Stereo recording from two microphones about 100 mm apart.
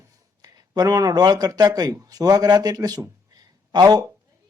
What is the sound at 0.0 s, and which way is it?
A man's voice, 40° right (ahead or behind).